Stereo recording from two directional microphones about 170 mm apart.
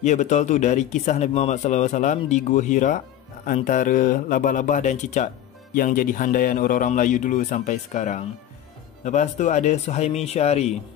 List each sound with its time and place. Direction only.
0.0 s a man's voice: 45° left (ahead or behind)
5.8 s a man's voice: 55° left (ahead or behind); by 10.7 s 40° left (ahead or behind)